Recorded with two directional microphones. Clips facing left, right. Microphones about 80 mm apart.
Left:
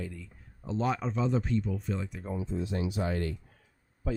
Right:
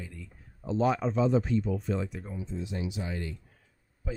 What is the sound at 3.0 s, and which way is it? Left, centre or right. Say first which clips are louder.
Speech: left 5 dB; left.